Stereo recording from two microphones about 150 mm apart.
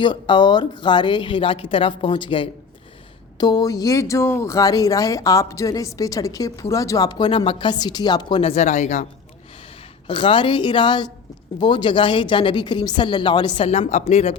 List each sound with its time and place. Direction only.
0.0 s speech: 30° left (ahead or behind); by 9.0 s 55° left (ahead or behind)
10.1 s speech: 35° left (ahead or behind)
13.7 s speech: 45° left (ahead or behind)